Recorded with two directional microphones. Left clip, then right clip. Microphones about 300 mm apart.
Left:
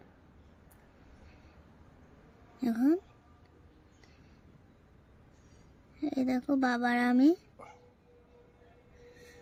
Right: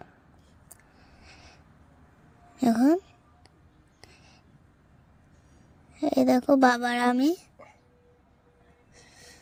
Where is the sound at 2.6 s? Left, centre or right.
Right.